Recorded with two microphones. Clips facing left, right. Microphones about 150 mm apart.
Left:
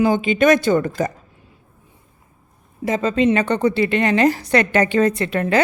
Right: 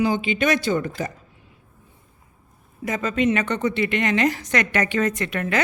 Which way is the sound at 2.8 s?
30° left (ahead or behind).